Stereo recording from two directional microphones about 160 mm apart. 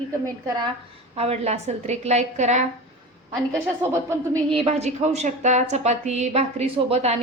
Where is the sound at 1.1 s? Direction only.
40° right (ahead or behind).